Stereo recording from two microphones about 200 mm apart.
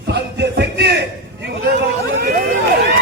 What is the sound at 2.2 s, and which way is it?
Speech, 45° right (ahead or behind).